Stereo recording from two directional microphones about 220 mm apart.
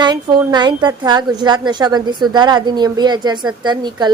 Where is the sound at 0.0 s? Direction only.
20° right (ahead or behind).